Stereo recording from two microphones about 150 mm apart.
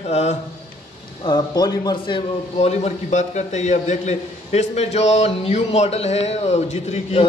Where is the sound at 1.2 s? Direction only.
30° left (ahead or behind).